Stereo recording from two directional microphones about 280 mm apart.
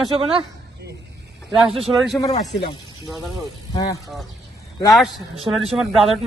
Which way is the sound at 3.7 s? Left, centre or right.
Centre.